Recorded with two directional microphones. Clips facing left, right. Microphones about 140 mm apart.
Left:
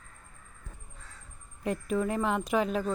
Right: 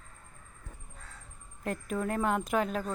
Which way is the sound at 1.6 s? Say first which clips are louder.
Left 3 dB; centre (ahead or behind).